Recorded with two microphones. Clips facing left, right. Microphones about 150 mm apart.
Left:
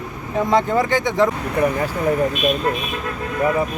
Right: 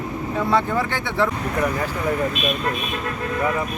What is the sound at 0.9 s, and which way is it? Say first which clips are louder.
Speech: left 5 dB; 15° left (ahead or behind).